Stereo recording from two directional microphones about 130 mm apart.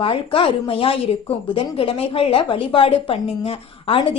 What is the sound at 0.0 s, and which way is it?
A woman's voice, 40° left (ahead or behind).